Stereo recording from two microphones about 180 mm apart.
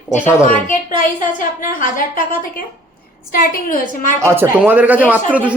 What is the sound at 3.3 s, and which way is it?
Speech, 50° left (ahead or behind).